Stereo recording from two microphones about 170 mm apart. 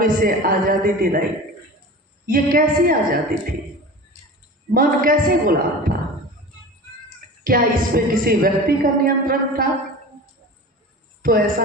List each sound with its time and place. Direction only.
0.0 s a woman's voice: 55° right (ahead or behind)
2.2 s a woman's voice: 55° right (ahead or behind)
4.7 s a woman's voice: 55° right (ahead or behind)
7.4 s a woman's voice: 60° right (ahead or behind)
11.2 s a woman's voice: 60° right (ahead or behind)